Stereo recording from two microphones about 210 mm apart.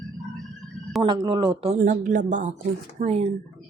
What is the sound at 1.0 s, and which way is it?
Speech, 20° right (ahead or behind).